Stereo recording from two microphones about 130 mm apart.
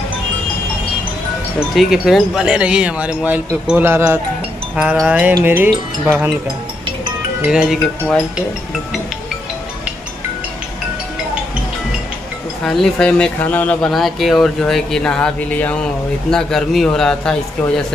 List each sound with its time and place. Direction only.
1.8 s speech: centre (ahead or behind)
7.4 s speech: 5° right (ahead or behind)
12.6 s speech: 5° left (ahead or behind)
13.9 s speech: centre (ahead or behind)